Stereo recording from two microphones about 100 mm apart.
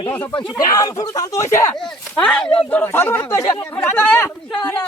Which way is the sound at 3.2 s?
35° left (ahead or behind).